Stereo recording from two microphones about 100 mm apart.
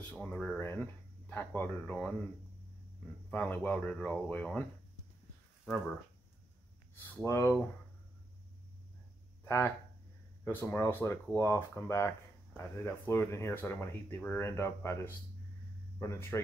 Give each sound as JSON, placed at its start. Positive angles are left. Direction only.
{"t": 0.1, "sound": "speech", "side_deg": 10}
{"t": 0.6, "sound": "speech", "side_deg": 25}
{"t": 3.3, "sound": "speech", "side_deg": 15}
{"t": 7.2, "sound": "speech", "side_deg": 30}
{"t": 9.4, "sound": "a sound", "side_deg": 25}
{"t": 10.4, "sound": "speech", "side_deg": 20}